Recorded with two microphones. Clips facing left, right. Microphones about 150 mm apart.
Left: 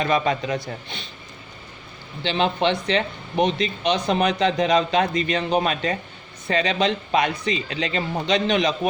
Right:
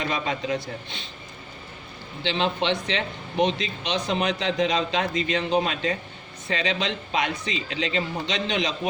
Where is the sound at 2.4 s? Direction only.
55° left (ahead or behind).